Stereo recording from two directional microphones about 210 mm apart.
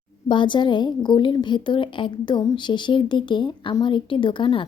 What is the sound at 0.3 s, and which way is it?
A woman's voice, 20° left (ahead or behind).